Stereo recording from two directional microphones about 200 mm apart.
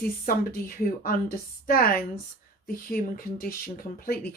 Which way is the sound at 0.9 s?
45° left (ahead or behind).